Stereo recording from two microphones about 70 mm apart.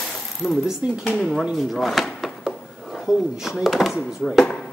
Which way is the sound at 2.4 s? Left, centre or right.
Centre.